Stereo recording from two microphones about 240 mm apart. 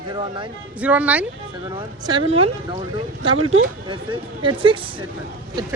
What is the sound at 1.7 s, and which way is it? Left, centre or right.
Speech, centre.